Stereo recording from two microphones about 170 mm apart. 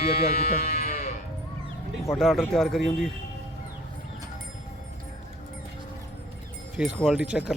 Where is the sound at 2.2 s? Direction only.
Centre (ahead or behind).